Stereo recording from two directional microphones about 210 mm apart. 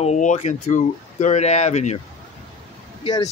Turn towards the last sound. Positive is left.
turn(degrees=20)  # may be behind; listen again after turning